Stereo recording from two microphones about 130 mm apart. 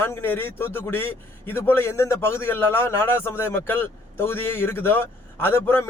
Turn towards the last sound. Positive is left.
turn(degrees=15)  # may be behind; listen again after turning